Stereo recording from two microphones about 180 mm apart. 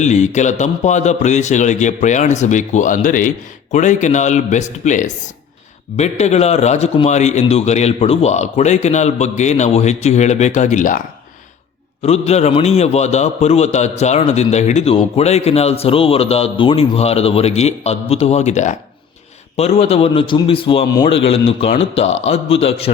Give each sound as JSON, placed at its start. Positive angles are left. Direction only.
{"t": 0.0, "sound": "a man's voice", "side_deg": 40}
{"t": 12.0, "sound": "a man's voice", "side_deg": 35}